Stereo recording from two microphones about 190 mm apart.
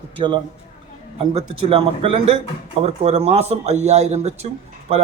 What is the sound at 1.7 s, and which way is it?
A man's voice, 30° right (ahead or behind).